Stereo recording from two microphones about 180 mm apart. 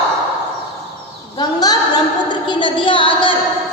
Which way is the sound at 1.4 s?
20° left (ahead or behind).